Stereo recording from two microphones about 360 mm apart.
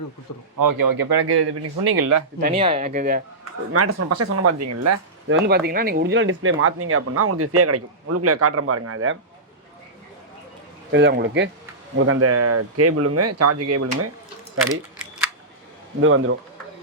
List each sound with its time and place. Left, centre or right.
0.6 s speech: right
2.4 s speech: centre
3.7 s speech: right
5.5 s speech: right
10.9 s speech: right
16.0 s speech: right